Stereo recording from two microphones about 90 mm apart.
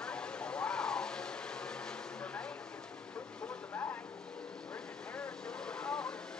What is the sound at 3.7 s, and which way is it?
Vehicle, 25° left (ahead or behind).